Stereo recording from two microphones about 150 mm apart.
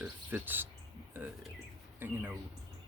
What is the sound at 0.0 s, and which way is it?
Cricket, 10° right (ahead or behind).